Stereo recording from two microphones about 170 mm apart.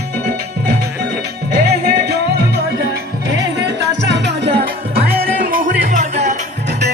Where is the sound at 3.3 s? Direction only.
90° right; by 6.3 s 45° right (ahead or behind).